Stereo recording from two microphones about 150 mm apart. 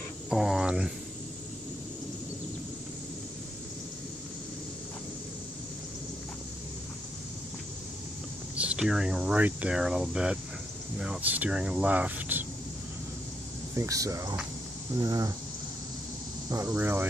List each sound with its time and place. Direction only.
0.3 s a sound: 5° right (ahead or behind)
8.5 s speech: 5° right (ahead or behind)
13.7 s speech: 20° right (ahead or behind)
16.4 s speech: 20° right (ahead or behind)